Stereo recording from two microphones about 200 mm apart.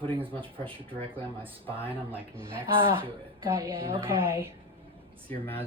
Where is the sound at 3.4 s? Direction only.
15° right (ahead or behind).